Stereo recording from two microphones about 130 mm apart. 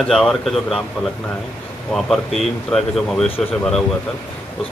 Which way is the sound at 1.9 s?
Centre (ahead or behind).